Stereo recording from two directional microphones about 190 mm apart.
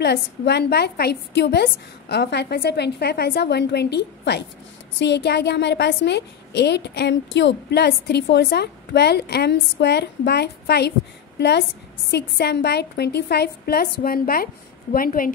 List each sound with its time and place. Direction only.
0.0 s a woman's voice: 60° left (ahead or behind)